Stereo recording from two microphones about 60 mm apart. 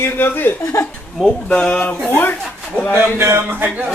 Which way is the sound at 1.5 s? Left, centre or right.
Centre.